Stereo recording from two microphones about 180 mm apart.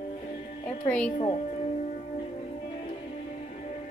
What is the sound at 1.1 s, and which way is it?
Speech, 35° left (ahead or behind).